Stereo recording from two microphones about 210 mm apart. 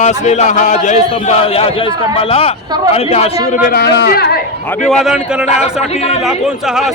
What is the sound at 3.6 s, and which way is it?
Speech, 45° left (ahead or behind).